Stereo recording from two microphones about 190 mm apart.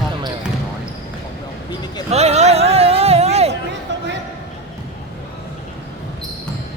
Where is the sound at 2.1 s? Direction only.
35° right (ahead or behind).